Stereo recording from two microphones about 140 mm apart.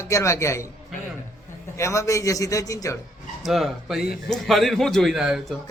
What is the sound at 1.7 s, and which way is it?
Speech, 20° left (ahead or behind).